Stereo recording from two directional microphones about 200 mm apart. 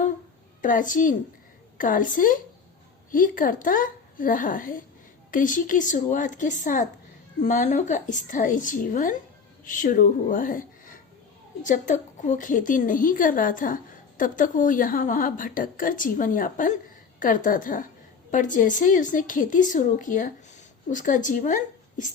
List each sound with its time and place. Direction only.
0.6 s a woman's voice: 40° left (ahead or behind)